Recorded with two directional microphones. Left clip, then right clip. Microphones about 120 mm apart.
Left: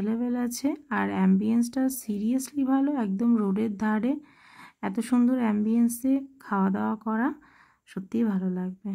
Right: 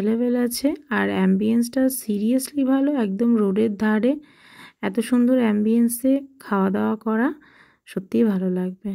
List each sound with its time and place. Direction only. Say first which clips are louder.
0.0 s a woman's voice: right 8 dB; 15° right (ahead or behind)